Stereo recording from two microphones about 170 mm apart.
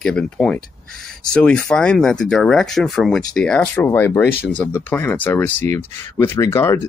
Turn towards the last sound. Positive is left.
turn(degrees=15)  # may be behind; listen again after turning